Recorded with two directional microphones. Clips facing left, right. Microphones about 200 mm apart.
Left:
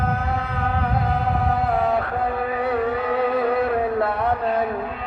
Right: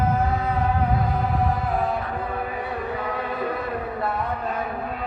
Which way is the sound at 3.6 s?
65° left (ahead or behind).